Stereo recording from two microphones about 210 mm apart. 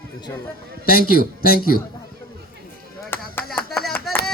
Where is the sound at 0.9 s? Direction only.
45° left (ahead or behind).